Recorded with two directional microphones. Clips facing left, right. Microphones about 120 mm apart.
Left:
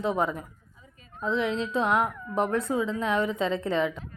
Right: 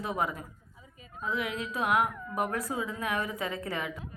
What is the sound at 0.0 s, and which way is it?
A woman's voice, 25° left (ahead or behind).